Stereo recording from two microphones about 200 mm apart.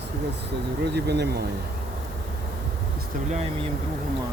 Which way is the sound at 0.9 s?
55° right (ahead or behind).